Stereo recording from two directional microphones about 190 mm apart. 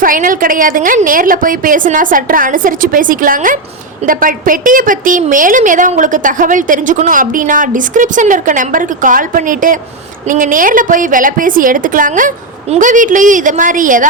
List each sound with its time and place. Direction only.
0.0 s a woman's voice: 45° right (ahead or behind)